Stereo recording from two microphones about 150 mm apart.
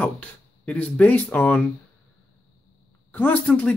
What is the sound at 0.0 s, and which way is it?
Speech, 10° left (ahead or behind).